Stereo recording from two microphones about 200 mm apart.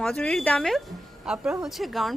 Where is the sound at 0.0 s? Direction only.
5° left (ahead or behind).